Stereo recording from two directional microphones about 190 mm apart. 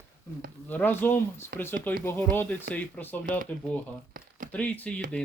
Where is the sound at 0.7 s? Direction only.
10° left (ahead or behind).